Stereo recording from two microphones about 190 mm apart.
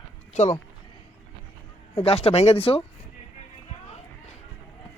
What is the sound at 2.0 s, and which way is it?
Speech, 30° left (ahead or behind).